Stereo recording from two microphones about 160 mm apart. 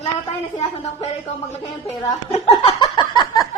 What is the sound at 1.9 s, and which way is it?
Speech, 40° left (ahead or behind).